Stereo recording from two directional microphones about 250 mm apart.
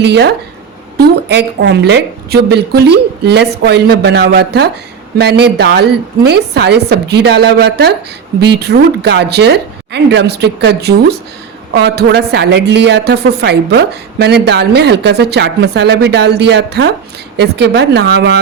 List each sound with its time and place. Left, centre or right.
0.0 s a man's voice: right